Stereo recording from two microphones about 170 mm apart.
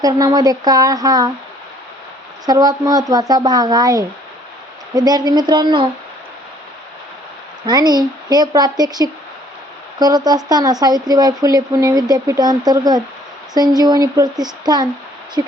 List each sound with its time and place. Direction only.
0.0 s speech: 20° right (ahead or behind)
2.5 s speech: 20° right (ahead or behind)
7.7 s speech: 25° right (ahead or behind)